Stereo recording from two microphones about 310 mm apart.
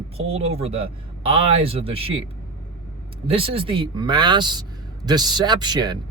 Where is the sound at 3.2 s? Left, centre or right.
Centre.